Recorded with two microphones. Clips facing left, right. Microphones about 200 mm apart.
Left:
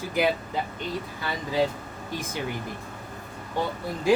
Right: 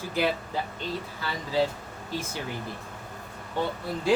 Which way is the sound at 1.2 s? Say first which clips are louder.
Left 1 dB; 15° left (ahead or behind).